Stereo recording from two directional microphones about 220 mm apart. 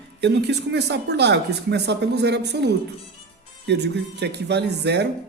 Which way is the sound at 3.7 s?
50° right (ahead or behind).